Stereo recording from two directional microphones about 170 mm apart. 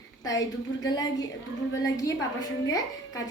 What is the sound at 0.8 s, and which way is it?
A woman's voice, 25° left (ahead or behind).